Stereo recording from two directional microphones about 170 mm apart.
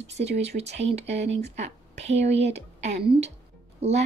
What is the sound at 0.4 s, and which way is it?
A woman's voice, 40° right (ahead or behind).